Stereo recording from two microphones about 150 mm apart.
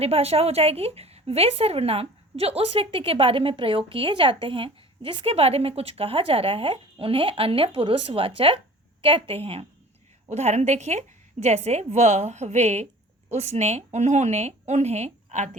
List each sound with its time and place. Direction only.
0.0 s a woman's voice: 40° right (ahead or behind)